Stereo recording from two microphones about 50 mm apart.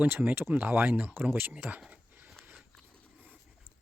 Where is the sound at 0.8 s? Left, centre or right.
Right.